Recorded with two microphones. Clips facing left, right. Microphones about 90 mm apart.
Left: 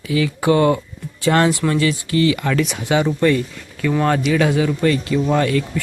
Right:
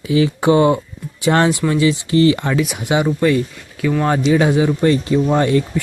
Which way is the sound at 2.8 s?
15° right (ahead or behind).